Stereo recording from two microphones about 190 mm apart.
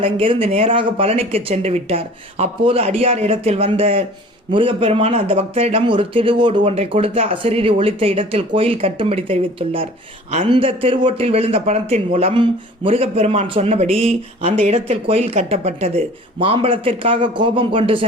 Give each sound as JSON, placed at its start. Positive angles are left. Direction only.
{"t": 0.0, "sound": "speech", "side_deg": -30}